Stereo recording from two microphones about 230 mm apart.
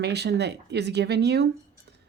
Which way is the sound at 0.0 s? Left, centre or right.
Right.